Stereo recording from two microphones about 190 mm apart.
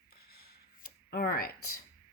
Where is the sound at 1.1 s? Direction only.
55° left (ahead or behind).